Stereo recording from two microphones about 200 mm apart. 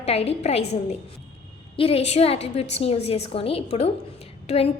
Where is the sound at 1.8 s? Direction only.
30° left (ahead or behind).